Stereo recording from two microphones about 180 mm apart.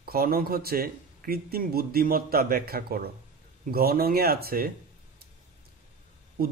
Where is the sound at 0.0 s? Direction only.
55° right (ahead or behind).